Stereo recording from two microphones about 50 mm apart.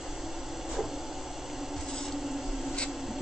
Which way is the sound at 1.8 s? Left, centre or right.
Centre.